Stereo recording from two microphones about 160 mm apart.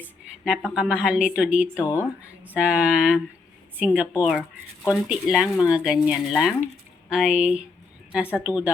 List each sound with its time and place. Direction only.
0.0 s a woman's voice: 5° right (ahead or behind)